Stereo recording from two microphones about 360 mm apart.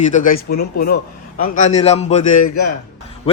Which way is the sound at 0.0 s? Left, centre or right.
Left.